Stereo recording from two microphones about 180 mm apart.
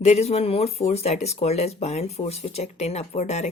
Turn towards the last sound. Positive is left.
turn(degrees=40)  # may be behind; listen again after turning